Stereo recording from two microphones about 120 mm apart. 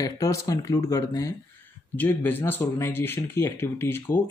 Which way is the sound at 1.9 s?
15° left (ahead or behind).